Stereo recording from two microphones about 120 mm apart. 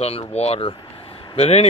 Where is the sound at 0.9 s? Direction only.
50° left (ahead or behind).